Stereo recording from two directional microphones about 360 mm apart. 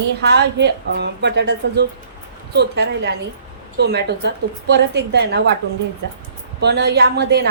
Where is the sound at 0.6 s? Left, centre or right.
Right.